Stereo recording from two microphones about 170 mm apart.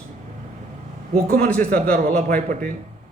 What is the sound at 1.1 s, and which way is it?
Speech, 60° right (ahead or behind).